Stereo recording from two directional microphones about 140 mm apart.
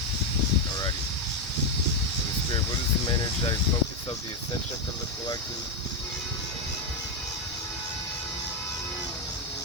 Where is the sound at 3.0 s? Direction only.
35° left (ahead or behind).